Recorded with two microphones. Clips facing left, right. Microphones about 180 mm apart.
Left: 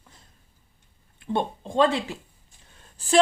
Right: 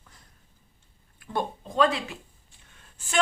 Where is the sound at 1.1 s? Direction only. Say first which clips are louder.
Left 4 dB; 25° left (ahead or behind).